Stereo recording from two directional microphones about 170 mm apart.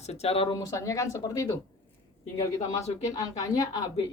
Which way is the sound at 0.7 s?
15° left (ahead or behind).